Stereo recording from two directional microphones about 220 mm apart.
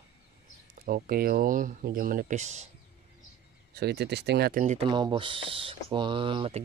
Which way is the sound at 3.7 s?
50° right (ahead or behind).